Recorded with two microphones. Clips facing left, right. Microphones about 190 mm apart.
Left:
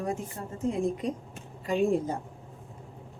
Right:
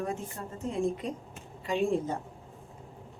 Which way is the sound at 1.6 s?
40° left (ahead or behind).